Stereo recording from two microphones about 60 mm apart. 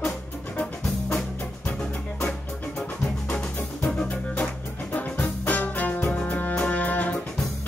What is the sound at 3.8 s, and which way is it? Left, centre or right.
Music, left.